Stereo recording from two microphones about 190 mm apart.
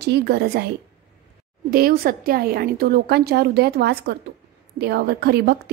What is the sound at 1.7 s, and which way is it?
A woman's voice, 50° right (ahead or behind).